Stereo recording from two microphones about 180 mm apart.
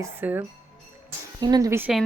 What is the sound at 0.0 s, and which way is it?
Speech, 10° right (ahead or behind).